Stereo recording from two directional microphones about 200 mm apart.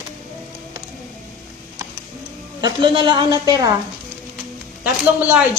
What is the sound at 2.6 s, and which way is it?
A man's voice, 25° right (ahead or behind).